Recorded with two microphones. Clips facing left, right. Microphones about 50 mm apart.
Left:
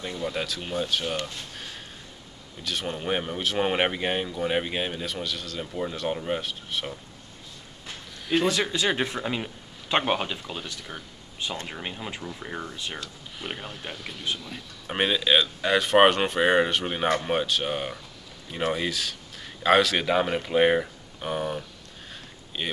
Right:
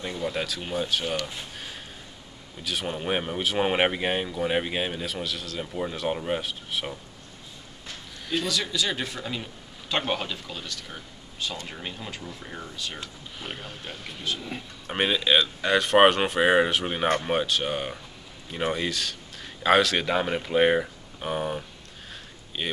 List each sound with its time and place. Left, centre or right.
0.0 s speech: centre
1.2 s a sound: centre
2.6 s speech: centre
8.5 s a man's voice: left
13.4 s speech: centre